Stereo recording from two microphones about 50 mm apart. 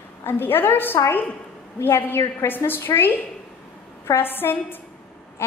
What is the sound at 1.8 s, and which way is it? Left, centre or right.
A woman's voice, left.